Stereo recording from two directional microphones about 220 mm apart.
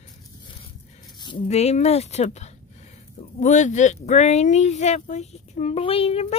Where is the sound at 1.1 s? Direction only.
25° left (ahead or behind).